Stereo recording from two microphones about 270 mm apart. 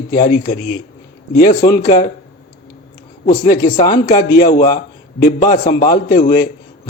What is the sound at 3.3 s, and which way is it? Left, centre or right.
Speech, left.